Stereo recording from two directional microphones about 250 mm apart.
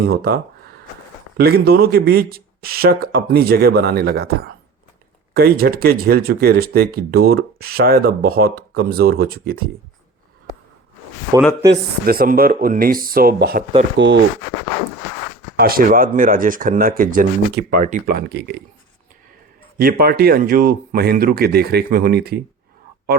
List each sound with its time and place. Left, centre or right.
0.0 s speech: right
1.4 s speech: right
11.7 s speech: right
15.5 s speech: right
19.8 s speech: right